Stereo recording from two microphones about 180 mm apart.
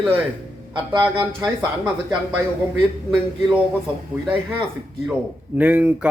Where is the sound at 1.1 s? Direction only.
25° right (ahead or behind).